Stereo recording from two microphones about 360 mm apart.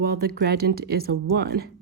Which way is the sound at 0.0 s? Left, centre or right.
Right.